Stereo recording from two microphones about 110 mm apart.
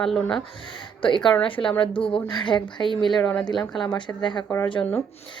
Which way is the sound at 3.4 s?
40° left (ahead or behind).